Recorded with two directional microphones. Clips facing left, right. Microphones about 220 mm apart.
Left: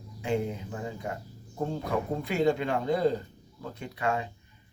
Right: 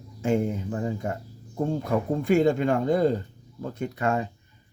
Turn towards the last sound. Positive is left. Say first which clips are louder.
# right 4 dB
turn(degrees=-45)  # may be behind; listen again after turning